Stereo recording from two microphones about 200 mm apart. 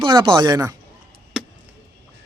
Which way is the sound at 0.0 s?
20° right (ahead or behind).